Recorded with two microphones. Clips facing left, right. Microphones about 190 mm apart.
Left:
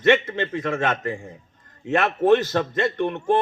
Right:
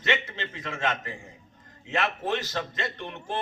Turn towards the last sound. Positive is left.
turn(degrees=55)  # may be behind; listen again after turning